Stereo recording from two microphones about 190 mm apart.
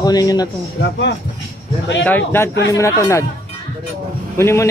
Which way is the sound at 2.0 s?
10° left (ahead or behind).